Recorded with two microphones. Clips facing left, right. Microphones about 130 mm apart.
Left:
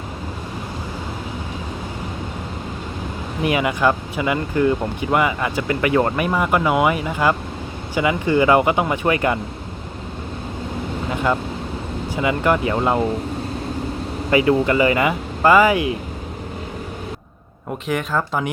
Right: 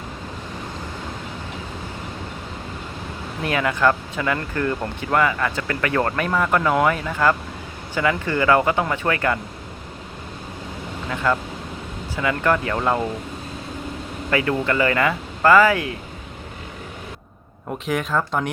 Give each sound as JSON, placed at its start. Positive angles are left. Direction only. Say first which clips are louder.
{"t": 3.4, "sound": "speech", "louder": "left 2 dB", "side_deg": 15}
{"t": 11.1, "sound": "speech", "louder": "left 1 dB", "side_deg": 20}
{"t": 14.3, "sound": "speech", "louder": "left 5 dB", "side_deg": 15}
{"t": 17.8, "sound": "speech", "louder": "left 1 dB", "side_deg": 0}